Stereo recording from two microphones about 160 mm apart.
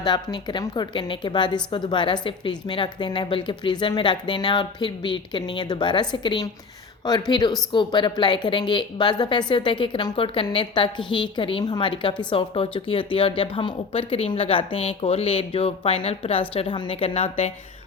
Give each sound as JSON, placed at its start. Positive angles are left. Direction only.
{"t": 0.0, "sound": "a woman's voice", "side_deg": 25}